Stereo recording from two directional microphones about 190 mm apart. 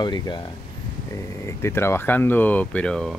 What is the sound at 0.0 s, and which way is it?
Speech, 25° left (ahead or behind).